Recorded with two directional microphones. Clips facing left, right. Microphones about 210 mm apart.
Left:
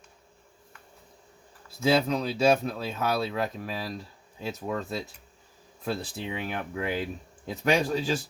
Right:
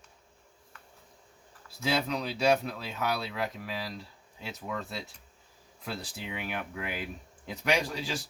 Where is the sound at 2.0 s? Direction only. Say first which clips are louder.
Left 4 dB; 45° left (ahead or behind).